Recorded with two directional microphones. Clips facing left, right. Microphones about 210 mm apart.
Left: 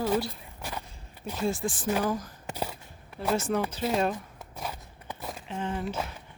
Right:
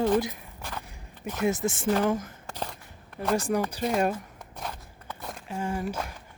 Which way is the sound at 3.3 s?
15° right (ahead or behind).